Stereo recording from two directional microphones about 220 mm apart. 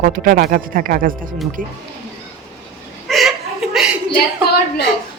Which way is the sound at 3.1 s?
Centre (ahead or behind).